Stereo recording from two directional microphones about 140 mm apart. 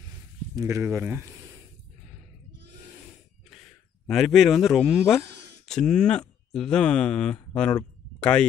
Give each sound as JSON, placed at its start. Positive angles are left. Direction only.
{"t": 0.6, "sound": "speech", "side_deg": -20}
{"t": 3.4, "sound": "speech", "side_deg": 0}